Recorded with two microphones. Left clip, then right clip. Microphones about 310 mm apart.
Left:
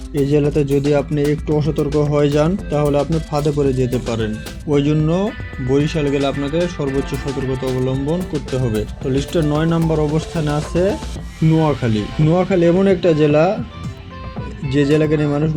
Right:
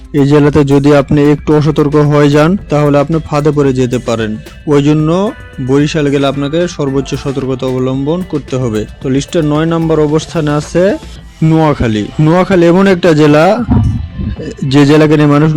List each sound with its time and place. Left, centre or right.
0.1 s speech: right
14.7 s speech: right